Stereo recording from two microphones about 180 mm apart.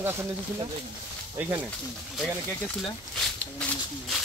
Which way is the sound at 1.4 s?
10° right (ahead or behind).